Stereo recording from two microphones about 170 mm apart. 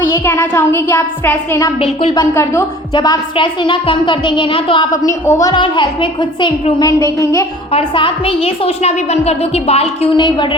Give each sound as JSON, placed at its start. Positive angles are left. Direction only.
{"t": 0.0, "sound": "a woman's voice", "side_deg": 10}
{"t": 1.8, "sound": "a woman's voice", "side_deg": 30}
{"t": 2.1, "sound": "a woman's voice", "side_deg": 15}
{"t": 5.0, "sound": "a woman's voice", "side_deg": 15}
{"t": 7.7, "sound": "a woman's voice", "side_deg": 30}